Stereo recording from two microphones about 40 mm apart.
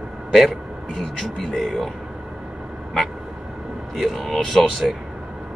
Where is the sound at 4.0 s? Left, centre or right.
Centre.